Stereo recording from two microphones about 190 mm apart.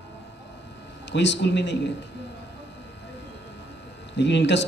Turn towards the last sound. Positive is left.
turn(degrees=70)  # may be behind; listen again after turning